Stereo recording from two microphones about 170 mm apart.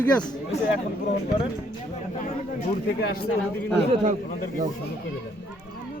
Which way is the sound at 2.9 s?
70° left (ahead or behind).